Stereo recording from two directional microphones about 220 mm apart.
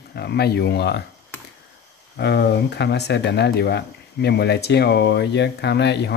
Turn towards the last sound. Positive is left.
turn(degrees=50)  # may be behind; listen again after turning